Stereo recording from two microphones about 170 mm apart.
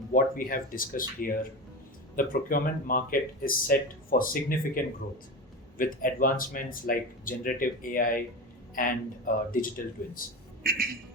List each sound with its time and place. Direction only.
0.1 s speech: 55° left (ahead or behind)
10.6 s speech: 60° right (ahead or behind)